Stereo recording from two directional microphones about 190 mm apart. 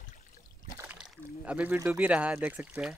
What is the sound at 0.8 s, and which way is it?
Speech, 5° right (ahead or behind).